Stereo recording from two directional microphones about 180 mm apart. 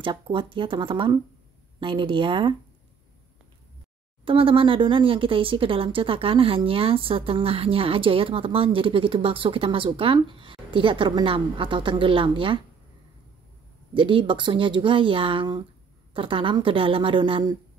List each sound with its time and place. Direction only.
0.0 s speech: 25° right (ahead or behind)
4.2 s speech: 30° right (ahead or behind)
13.9 s speech: 30° right (ahead or behind)